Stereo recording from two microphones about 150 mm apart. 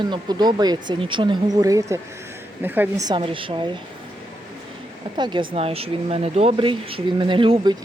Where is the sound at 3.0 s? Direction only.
35° right (ahead or behind).